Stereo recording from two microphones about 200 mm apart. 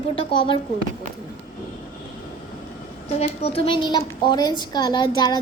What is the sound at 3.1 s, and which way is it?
A child's voice, 30° left (ahead or behind).